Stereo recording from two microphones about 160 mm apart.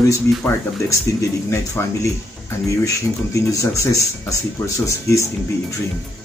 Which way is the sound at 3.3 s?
20° left (ahead or behind).